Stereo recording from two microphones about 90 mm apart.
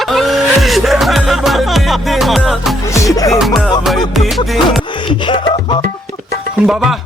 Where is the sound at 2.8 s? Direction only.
35° left (ahead or behind).